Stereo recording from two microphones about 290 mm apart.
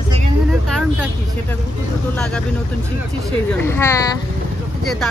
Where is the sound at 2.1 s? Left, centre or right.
Centre.